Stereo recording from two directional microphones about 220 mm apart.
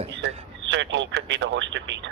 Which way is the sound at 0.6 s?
55° right (ahead or behind).